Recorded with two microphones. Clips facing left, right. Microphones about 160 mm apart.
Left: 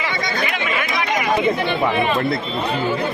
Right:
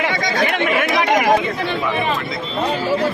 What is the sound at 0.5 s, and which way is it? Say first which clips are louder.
Chatter: right 5 dB; 55° right (ahead or behind).